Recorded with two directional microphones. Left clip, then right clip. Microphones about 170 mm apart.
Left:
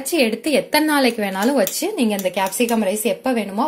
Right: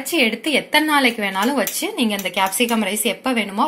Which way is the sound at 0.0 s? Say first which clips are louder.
Even; 55° left (ahead or behind).